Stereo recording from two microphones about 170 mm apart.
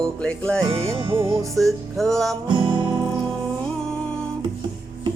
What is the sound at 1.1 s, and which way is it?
Music, 30° right (ahead or behind).